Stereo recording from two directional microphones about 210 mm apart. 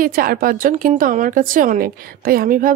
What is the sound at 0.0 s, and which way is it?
A woman's voice, 45° right (ahead or behind).